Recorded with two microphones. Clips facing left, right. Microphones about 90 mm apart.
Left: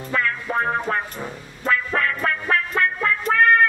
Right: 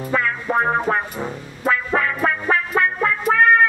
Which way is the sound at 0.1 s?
10° right (ahead or behind).